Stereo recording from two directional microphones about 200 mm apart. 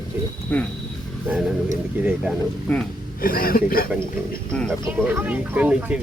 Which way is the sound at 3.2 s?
45° left (ahead or behind).